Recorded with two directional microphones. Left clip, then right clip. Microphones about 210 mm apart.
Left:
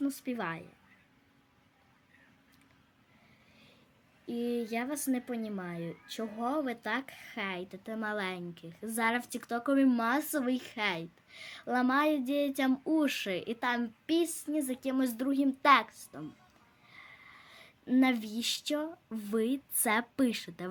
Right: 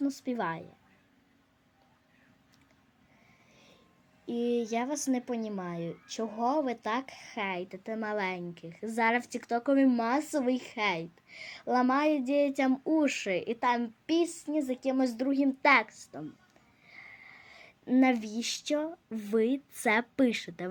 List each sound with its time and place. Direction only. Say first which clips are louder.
0.0 s a woman's voice: right 3 dB; 10° left (ahead or behind)
4.3 s a woman's voice: right 4 dB; 10° left (ahead or behind)